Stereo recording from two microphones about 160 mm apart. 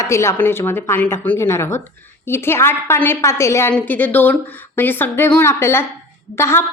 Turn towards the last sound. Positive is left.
turn(degrees=15)  # may be behind; listen again after turning